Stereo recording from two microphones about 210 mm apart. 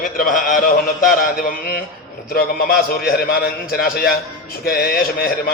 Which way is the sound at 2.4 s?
45° left (ahead or behind).